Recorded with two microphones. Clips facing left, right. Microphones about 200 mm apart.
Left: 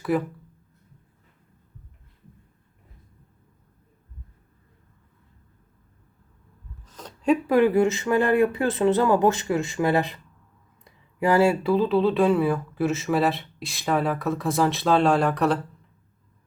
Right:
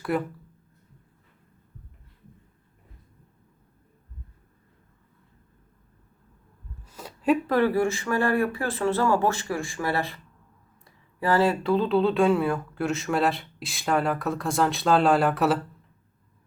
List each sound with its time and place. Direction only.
0.0 s speech: centre (ahead or behind)
6.8 s a sound: 10° right (ahead or behind)
7.4 s speech: 15° left (ahead or behind); by 15.5 s 5° right (ahead or behind)